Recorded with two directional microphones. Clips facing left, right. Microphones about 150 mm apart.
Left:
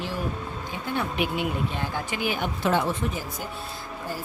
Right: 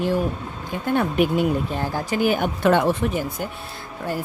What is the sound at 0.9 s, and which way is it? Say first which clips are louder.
Speech: right 8 dB; 50° right (ahead or behind).